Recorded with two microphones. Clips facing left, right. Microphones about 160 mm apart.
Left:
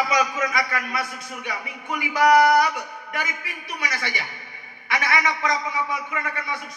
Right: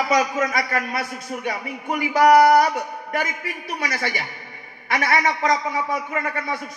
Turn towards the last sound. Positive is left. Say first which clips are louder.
# right 4 dB
turn(degrees=-40)  # may be behind; listen again after turning